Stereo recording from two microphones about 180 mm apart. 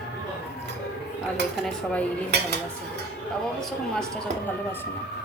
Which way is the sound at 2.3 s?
65° right (ahead or behind).